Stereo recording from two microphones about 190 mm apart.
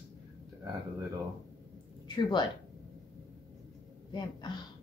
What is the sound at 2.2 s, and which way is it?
Speech, 25° left (ahead or behind).